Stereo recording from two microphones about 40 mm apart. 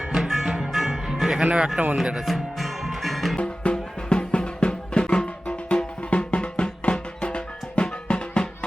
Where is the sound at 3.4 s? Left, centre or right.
Left.